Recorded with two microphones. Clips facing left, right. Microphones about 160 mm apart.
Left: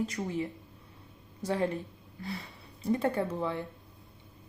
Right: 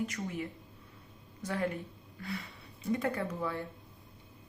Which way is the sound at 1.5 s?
30° left (ahead or behind).